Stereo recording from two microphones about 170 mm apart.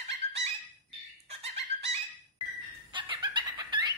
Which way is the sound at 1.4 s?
40° right (ahead or behind).